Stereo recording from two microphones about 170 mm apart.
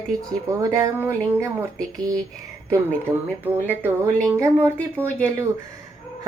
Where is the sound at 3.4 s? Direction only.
10° right (ahead or behind).